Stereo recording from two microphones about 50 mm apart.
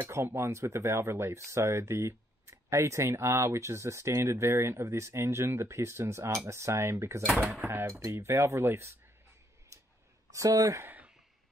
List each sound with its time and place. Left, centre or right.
0.1 s speech: right
7.3 s speech: centre
7.6 s speech: right
9.7 s a sound: right
10.3 s speech: right